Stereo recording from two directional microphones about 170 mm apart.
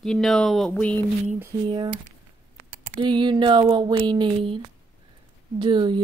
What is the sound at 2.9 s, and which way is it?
Speech, 25° right (ahead or behind).